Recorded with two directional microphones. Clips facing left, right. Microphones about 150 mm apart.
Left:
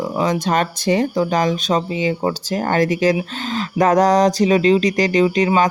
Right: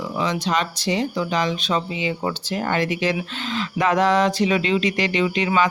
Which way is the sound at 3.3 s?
40° left (ahead or behind).